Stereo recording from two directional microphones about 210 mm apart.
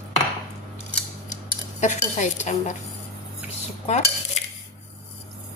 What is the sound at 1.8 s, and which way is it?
Speech, 35° left (ahead or behind).